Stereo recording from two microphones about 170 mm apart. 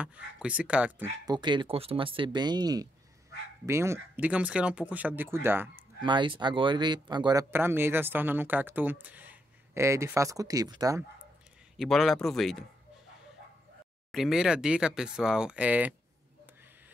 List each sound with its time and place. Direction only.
0.0 s speech: 5° right (ahead or behind)
1.2 s speech: 25° right (ahead or behind)
5.9 s speech: 25° right (ahead or behind)
7.5 s speech: 15° right (ahead or behind)
11.7 s speech: centre (ahead or behind)
14.1 s speech: centre (ahead or behind)